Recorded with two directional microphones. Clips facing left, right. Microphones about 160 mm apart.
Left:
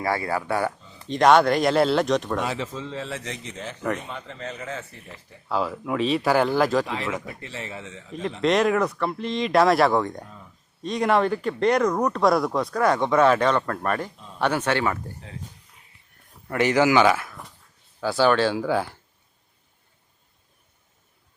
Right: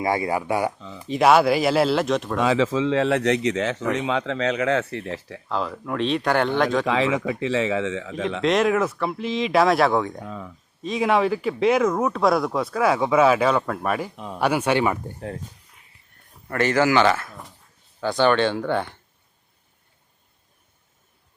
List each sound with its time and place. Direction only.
0.0 s speech: 15° right (ahead or behind); by 2.4 s centre (ahead or behind)
2.5 s speech: 90° right
5.5 s speech: 5° left (ahead or behind)
6.8 s speech: 90° right
8.4 s speech: centre (ahead or behind)
10.2 s speech: 90° right
10.8 s speech: centre (ahead or behind)
16.5 s speech: 15° left (ahead or behind)